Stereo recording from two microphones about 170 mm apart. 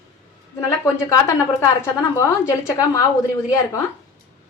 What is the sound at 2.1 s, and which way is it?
A woman's voice, 15° left (ahead or behind).